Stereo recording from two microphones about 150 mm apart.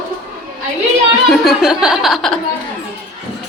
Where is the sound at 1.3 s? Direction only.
Centre (ahead or behind).